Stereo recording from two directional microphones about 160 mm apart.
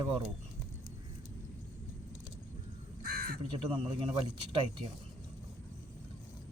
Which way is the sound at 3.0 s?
65° right (ahead or behind).